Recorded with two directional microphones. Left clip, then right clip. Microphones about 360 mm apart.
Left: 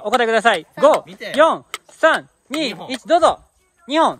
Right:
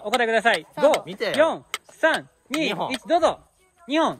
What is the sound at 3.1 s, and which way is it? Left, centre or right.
Speech, centre.